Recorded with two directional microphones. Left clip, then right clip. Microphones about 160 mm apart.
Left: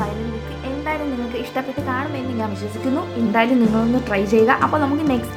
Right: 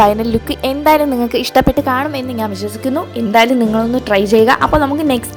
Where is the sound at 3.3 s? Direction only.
40° right (ahead or behind).